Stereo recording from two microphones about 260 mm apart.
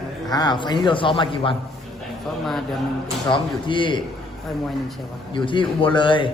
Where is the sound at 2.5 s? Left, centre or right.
Centre.